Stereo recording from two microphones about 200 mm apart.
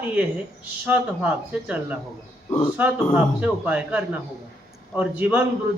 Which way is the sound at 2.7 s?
5° right (ahead or behind).